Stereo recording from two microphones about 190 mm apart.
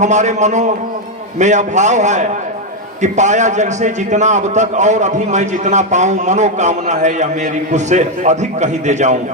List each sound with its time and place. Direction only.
0.0 s a man's voice: 40° right (ahead or behind)